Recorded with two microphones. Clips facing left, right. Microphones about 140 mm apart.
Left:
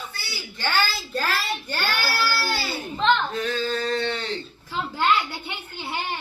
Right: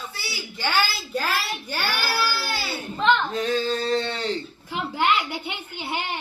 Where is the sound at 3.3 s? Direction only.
35° right (ahead or behind).